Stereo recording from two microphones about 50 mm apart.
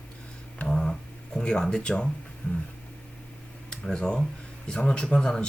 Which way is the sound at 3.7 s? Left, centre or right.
Centre.